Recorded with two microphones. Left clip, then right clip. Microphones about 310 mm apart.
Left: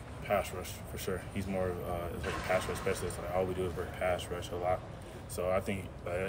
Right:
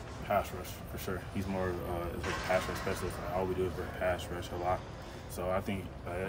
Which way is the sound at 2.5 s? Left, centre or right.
Centre.